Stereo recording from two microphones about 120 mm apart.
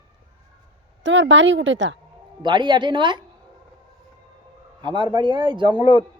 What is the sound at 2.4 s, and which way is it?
Speech, 40° right (ahead or behind).